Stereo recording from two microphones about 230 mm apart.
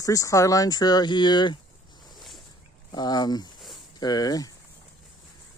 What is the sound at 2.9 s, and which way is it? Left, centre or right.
Speech, centre.